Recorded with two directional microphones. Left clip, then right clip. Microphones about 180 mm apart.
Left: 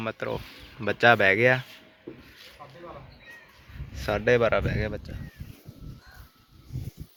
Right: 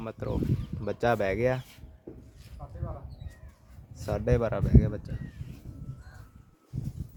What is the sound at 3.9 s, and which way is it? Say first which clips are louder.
Speech: left 6 dB; 15° right (ahead or behind).